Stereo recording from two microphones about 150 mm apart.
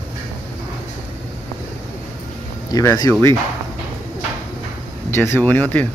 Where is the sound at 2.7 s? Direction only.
25° left (ahead or behind).